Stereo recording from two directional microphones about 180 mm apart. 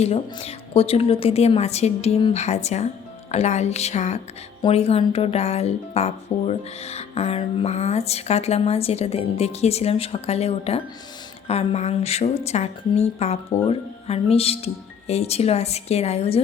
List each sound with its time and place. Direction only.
0.0 s speech: 35° left (ahead or behind)